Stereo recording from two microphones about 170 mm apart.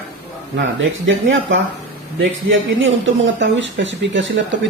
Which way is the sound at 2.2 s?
90° right.